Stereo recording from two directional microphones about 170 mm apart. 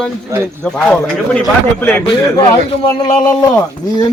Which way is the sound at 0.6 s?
5° left (ahead or behind).